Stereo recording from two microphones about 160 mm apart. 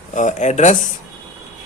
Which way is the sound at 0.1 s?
50° left (ahead or behind).